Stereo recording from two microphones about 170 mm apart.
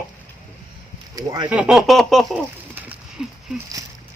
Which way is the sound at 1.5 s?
5° right (ahead or behind).